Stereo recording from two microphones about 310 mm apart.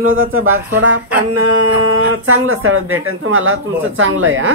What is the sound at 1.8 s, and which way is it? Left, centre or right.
Speech, right.